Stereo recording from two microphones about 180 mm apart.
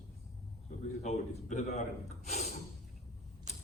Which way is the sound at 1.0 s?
40° left (ahead or behind).